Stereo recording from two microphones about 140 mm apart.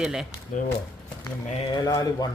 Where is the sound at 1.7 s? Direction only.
25° left (ahead or behind).